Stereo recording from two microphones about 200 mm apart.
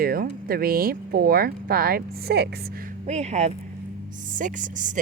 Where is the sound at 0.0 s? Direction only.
50° right (ahead or behind).